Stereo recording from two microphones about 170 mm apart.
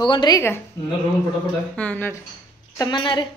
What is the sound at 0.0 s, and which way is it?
Speech, 25° left (ahead or behind).